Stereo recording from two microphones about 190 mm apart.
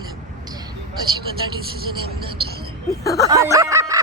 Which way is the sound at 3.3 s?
15° right (ahead or behind).